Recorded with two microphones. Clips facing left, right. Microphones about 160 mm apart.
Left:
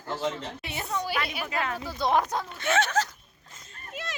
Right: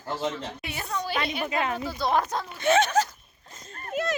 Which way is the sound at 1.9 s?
20° left (ahead or behind).